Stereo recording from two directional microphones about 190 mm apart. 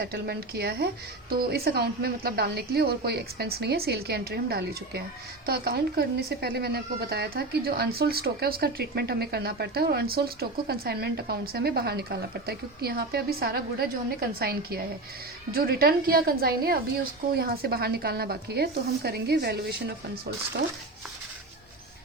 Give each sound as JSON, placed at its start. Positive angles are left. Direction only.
{"t": 0.0, "sound": "speech", "side_deg": -55}